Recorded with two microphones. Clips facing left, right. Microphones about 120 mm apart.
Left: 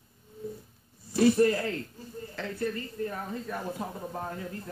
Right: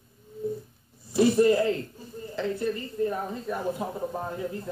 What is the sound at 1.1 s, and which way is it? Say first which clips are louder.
Speech: right 3 dB; 20° right (ahead or behind).